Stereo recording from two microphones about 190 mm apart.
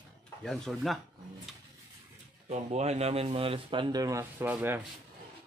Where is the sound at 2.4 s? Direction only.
35° right (ahead or behind); by 4.8 s 10° right (ahead or behind).